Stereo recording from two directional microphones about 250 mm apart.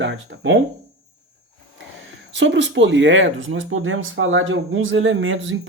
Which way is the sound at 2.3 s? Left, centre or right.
Right.